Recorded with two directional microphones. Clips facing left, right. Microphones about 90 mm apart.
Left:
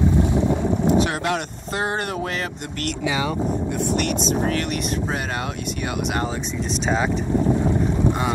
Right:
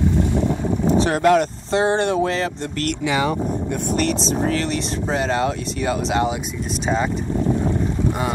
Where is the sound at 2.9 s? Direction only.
60° right (ahead or behind).